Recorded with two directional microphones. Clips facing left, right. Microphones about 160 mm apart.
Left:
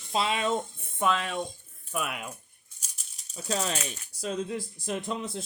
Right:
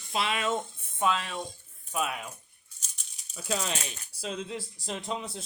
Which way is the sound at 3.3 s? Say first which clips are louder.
Left 2 dB; 40° left (ahead or behind).